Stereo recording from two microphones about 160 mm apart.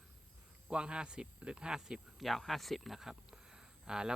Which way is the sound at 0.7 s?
5° right (ahead or behind).